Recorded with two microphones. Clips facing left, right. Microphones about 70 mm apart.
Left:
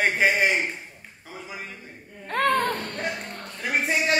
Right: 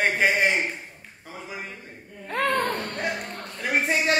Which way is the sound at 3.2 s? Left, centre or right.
Centre.